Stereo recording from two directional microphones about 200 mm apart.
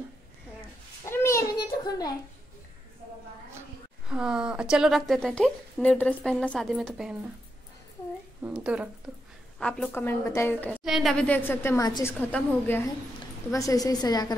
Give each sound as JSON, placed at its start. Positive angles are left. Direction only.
{"t": 1.0, "sound": "a sound", "side_deg": 15}
{"t": 1.9, "sound": "a child's voice", "side_deg": 20}
{"t": 4.1, "sound": "a woman's voice", "side_deg": -5}
{"t": 8.4, "sound": "speech", "side_deg": -5}
{"t": 9.6, "sound": "a woman's voice", "side_deg": 5}